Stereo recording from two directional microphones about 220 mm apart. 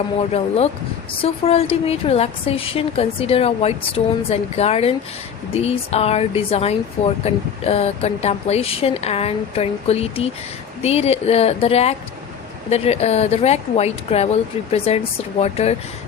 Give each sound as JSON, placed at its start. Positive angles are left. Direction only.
{"t": 0.2, "sound": "a woman's voice", "side_deg": 30}